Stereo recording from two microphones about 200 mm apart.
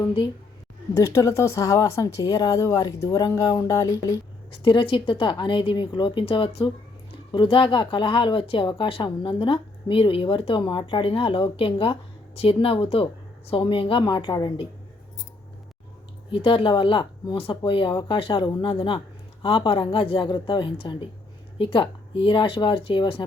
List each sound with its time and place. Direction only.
0.0 s speech: 25° left (ahead or behind)
16.3 s speech: 25° left (ahead or behind)